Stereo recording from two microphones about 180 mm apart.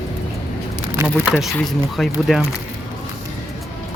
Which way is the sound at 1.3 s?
Centre (ahead or behind).